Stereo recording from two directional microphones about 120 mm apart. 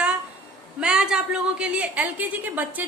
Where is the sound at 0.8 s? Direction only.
5° right (ahead or behind).